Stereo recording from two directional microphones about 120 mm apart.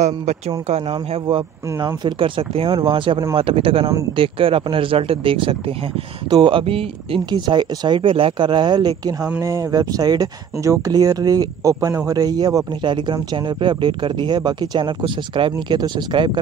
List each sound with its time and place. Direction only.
0.7 s speech: 60° right (ahead or behind)
2.0 s speech: 45° right (ahead or behind)